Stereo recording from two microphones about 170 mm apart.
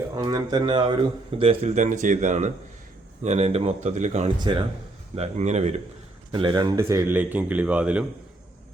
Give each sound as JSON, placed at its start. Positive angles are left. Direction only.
{"t": 0.2, "sound": "speech", "side_deg": -25}
{"t": 1.4, "sound": "speech", "side_deg": -40}
{"t": 4.4, "sound": "speech", "side_deg": -25}
{"t": 5.1, "sound": "speech", "side_deg": -40}
{"t": 6.3, "sound": "speech", "side_deg": -25}